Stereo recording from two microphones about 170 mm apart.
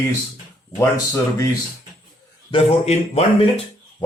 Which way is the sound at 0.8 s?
15° left (ahead or behind).